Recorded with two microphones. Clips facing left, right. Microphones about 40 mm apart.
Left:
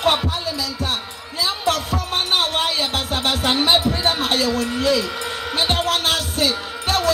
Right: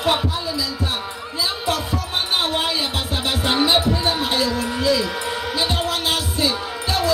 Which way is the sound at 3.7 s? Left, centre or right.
Left.